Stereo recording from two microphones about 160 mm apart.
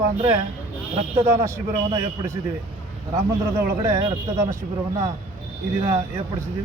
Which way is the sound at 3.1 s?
20° right (ahead or behind).